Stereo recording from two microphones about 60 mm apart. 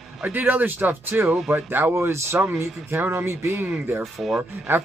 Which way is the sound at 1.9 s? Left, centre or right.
Right.